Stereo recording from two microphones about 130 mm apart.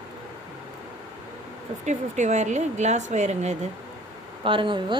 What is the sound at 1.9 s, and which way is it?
Speech, 65° right (ahead or behind).